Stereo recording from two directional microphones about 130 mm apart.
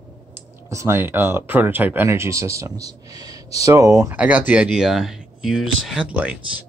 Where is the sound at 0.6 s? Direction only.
20° right (ahead or behind).